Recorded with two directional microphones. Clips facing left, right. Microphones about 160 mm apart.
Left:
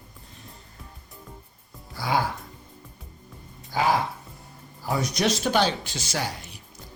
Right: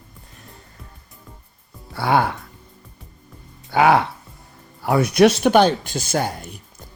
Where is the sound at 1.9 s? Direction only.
65° right (ahead or behind).